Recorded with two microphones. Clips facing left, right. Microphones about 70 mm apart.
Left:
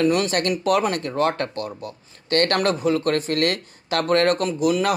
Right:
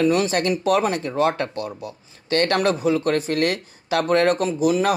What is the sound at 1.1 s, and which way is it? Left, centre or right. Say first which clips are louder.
Speech: right 1 dB; centre.